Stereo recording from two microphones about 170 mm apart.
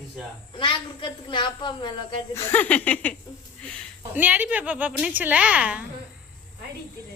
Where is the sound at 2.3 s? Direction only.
15° left (ahead or behind).